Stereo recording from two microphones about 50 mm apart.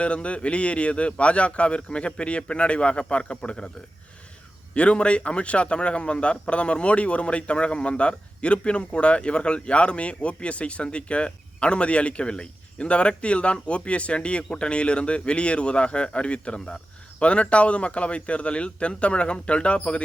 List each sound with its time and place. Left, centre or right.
0.0 s a man's voice: left
4.7 s a man's voice: left